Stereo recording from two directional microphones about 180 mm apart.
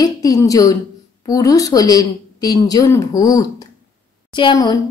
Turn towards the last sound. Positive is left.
turn(degrees=20)  # may be behind; listen again after turning